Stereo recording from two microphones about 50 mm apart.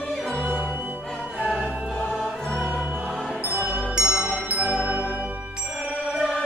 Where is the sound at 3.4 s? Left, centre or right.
Right.